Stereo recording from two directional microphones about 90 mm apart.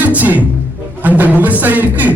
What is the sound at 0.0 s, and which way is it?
Music, 20° right (ahead or behind).